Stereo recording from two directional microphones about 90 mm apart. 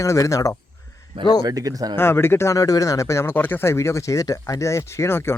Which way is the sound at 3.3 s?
20° left (ahead or behind).